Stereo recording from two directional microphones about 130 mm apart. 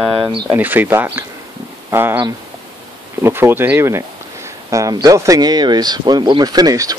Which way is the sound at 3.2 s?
15° right (ahead or behind).